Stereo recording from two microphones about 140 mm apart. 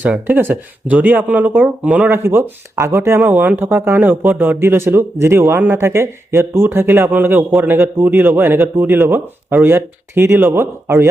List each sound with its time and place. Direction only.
0.0 s speech: 10° right (ahead or behind)